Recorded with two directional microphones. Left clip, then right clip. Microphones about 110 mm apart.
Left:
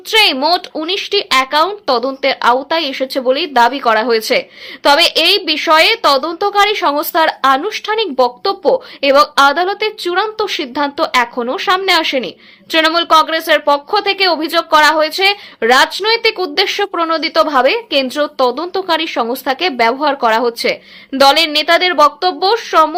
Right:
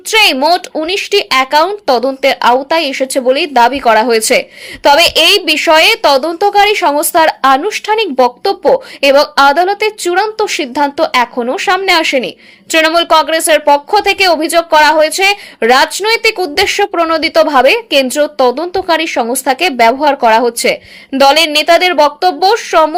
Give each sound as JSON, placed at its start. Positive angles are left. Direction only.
{"t": 0.1, "sound": "a woman's voice", "side_deg": -30}